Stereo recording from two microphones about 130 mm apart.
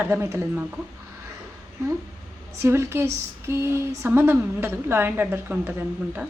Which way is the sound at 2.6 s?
20° right (ahead or behind).